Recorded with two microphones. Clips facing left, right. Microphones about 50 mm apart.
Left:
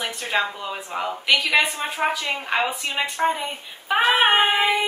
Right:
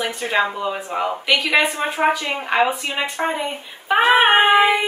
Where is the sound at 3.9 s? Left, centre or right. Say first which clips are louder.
Right 4 dB; centre.